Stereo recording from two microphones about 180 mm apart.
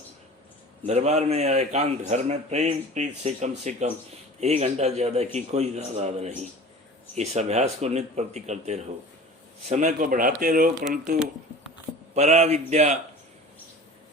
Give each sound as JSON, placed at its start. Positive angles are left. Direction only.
{"t": 0.9, "sound": "a man's voice", "side_deg": -40}
{"t": 12.1, "sound": "a man's voice", "side_deg": -40}